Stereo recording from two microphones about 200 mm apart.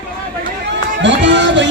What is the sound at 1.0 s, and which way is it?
Music, 65° right (ahead or behind).